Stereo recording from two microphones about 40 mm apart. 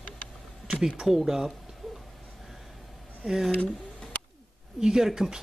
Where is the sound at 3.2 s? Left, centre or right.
Centre.